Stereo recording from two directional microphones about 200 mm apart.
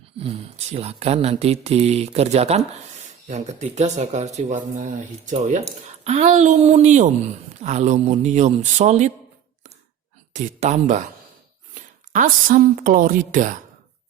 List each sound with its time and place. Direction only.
0.2 s speech: 30° right (ahead or behind)
10.3 s a woman's voice: 40° right (ahead or behind)